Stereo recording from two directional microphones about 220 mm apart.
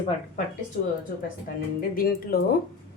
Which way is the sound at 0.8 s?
40° left (ahead or behind).